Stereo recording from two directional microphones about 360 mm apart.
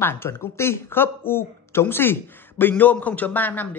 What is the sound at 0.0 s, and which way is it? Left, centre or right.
A man's voice, centre.